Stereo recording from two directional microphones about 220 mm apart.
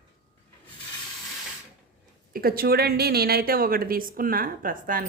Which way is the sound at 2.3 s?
45° right (ahead or behind).